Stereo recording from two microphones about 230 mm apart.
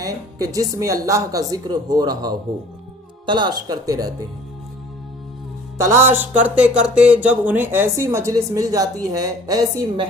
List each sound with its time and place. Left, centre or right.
0.0 s a woman's voice: centre
5.7 s a woman's voice: centre